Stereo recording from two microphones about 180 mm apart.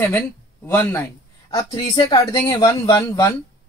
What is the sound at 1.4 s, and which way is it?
Speech, 25° left (ahead or behind).